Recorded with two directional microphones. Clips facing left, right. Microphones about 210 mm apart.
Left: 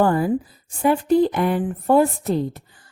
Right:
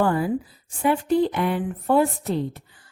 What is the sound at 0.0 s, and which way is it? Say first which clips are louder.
A woman's voice: left 3 dB; 45° left (ahead or behind).